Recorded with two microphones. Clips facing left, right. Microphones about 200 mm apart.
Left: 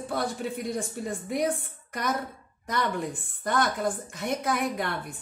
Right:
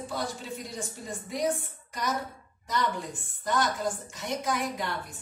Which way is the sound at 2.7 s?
55° left (ahead or behind).